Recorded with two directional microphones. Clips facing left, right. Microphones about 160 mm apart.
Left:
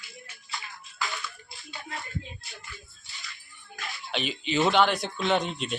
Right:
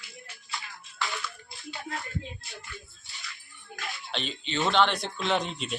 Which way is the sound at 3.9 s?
Centre (ahead or behind).